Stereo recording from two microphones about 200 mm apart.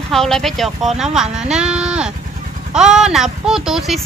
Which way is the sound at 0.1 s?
Centre (ahead or behind).